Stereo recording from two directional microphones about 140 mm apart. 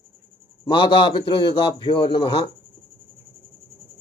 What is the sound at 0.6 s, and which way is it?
Speech, 35° left (ahead or behind).